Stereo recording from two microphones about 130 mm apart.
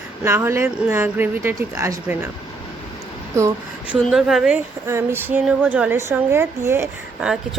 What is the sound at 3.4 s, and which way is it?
Speech, 25° right (ahead or behind).